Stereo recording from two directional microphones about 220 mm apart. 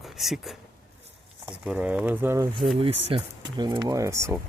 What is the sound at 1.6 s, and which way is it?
Speech, 5° right (ahead or behind).